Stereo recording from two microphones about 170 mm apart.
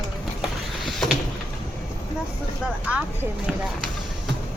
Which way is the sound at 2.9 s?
10° right (ahead or behind).